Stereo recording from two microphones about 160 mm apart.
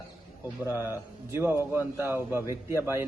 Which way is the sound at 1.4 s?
15° right (ahead or behind).